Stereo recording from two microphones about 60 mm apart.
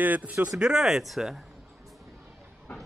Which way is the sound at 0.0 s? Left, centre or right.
Right.